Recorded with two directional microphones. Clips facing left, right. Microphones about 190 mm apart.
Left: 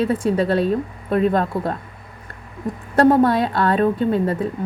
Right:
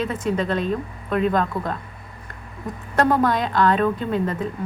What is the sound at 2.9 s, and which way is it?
A woman's voice, 30° left (ahead or behind).